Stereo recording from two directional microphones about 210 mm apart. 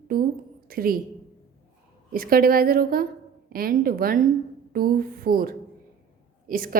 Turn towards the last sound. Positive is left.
turn(degrees=-40)  # may be behind; listen again after turning